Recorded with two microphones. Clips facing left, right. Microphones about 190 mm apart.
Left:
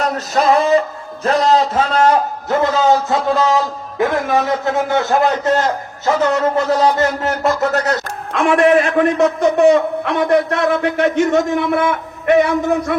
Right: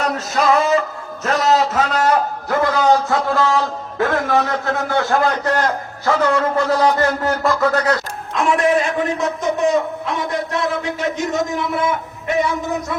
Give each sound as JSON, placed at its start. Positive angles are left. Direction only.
{"t": 0.0, "sound": "music", "side_deg": 35}
{"t": 1.2, "sound": "a sound", "side_deg": 30}
{"t": 2.5, "sound": "a man's voice", "side_deg": 25}
{"t": 8.3, "sound": "a man's voice", "side_deg": 65}